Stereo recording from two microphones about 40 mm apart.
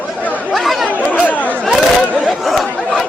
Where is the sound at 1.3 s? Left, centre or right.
Left.